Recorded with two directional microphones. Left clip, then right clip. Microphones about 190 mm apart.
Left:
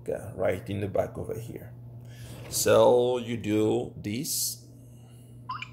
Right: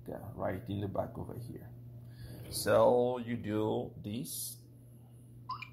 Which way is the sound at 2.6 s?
30° left (ahead or behind).